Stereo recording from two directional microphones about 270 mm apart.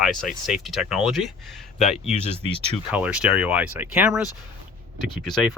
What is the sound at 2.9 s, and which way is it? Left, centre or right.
Speech, centre.